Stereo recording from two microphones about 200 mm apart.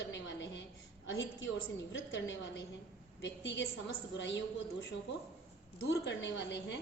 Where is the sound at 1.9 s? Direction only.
70° left (ahead or behind).